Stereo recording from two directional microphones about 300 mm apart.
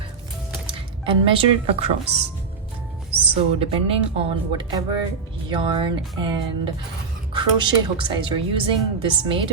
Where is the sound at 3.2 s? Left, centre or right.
Centre.